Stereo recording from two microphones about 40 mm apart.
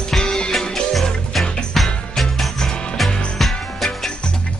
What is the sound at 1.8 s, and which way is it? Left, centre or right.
Music, centre.